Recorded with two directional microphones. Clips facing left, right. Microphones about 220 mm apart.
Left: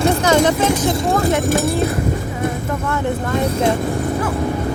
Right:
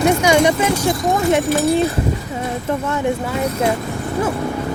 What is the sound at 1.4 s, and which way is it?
Speech, 50° left (ahead or behind).